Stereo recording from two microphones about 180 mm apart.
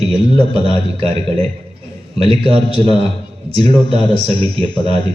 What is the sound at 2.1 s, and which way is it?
Speech, 30° right (ahead or behind).